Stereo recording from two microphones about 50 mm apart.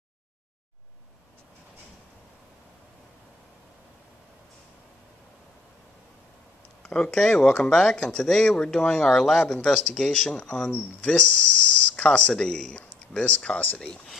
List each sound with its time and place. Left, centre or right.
6.8 s speech: centre